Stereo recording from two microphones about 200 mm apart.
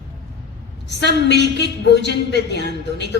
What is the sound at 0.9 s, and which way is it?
A woman's voice, 60° left (ahead or behind).